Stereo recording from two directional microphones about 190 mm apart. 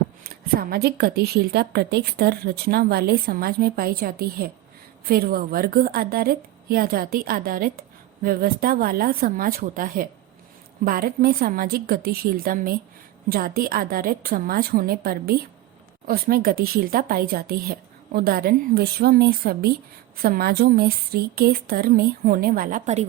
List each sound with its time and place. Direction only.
0.3 s a woman's voice: 50° right (ahead or behind)